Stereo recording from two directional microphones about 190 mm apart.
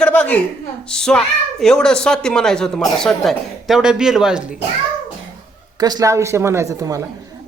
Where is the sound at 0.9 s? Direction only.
5° left (ahead or behind).